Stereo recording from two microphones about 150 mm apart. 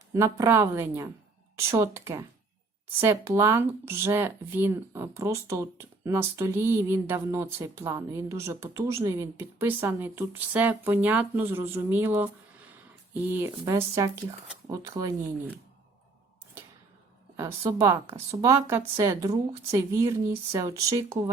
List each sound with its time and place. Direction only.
0.1 s a woman's voice: 20° right (ahead or behind)
17.7 s a woman's voice: 20° right (ahead or behind)